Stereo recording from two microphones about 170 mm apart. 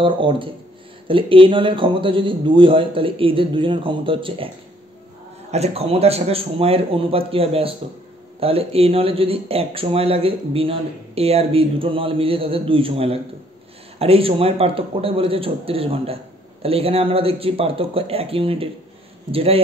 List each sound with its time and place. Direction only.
0.0 s speech: 30° right (ahead or behind)
5.5 s speech: 35° right (ahead or behind)